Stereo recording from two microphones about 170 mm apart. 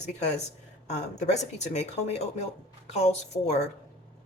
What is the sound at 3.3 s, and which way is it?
Speech, 25° left (ahead or behind).